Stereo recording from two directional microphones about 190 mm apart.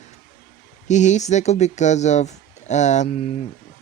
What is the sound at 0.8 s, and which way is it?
Speech, 40° left (ahead or behind).